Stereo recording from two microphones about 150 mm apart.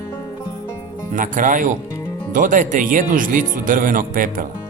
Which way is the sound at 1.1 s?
60° right (ahead or behind).